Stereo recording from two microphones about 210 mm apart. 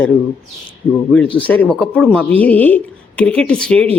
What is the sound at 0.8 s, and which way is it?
Speech, 25° left (ahead or behind).